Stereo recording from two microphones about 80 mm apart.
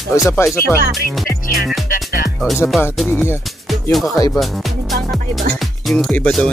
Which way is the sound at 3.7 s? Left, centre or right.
Centre.